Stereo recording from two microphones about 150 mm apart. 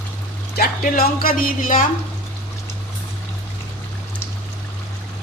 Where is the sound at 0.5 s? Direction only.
80° left; by 1.9 s 60° left (ahead or behind).